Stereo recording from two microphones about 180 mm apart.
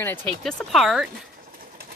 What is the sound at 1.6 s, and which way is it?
Bird, 55° right (ahead or behind).